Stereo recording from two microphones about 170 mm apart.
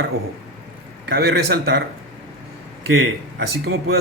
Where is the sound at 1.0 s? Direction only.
70° right (ahead or behind).